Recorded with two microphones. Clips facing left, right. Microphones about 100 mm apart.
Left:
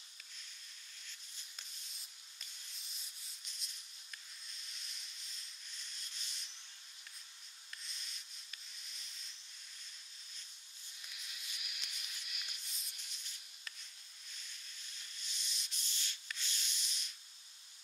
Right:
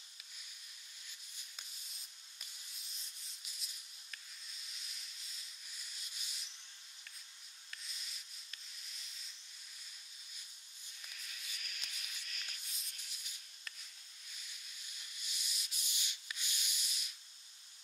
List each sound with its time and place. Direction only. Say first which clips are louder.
3.4 s maraca: even; 5° right (ahead or behind)
4.6 s sanding: even; 5° right (ahead or behind)
7.7 s sanding: even; 5° right (ahead or behind)
11.0 s a sound: right 1 dB; 10° left (ahead or behind)
12.7 s rub: even; 5° right (ahead or behind)
15.1 s sanding: right 1 dB; 5° right (ahead or behind)